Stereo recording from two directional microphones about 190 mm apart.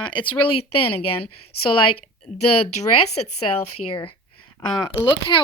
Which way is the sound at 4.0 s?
25° left (ahead or behind).